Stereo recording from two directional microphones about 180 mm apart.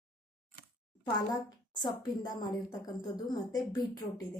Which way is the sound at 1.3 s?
20° left (ahead or behind).